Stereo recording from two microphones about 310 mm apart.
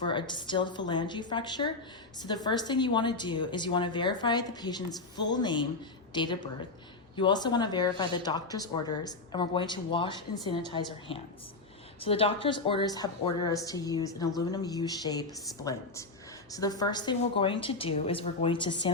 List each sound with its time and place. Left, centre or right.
0.0 s a woman's voice: centre